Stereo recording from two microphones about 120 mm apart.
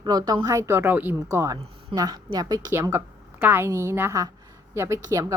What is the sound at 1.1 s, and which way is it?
A woman's voice, 25° right (ahead or behind).